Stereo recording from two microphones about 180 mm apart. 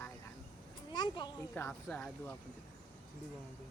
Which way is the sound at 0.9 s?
25° left (ahead or behind).